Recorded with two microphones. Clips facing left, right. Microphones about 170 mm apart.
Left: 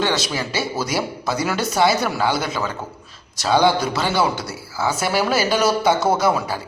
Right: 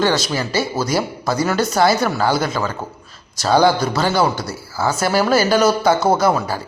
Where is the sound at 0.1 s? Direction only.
Centre (ahead or behind).